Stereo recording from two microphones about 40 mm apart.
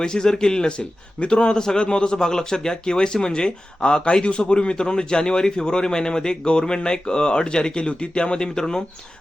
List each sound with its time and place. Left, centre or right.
0.0 s a man's voice: centre